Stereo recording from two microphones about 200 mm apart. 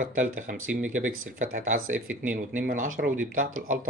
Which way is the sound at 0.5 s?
45° right (ahead or behind).